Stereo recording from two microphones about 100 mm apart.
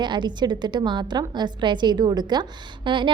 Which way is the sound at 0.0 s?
50° right (ahead or behind).